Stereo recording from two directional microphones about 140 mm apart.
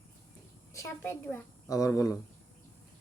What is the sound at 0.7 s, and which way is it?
A child's voice, 15° left (ahead or behind).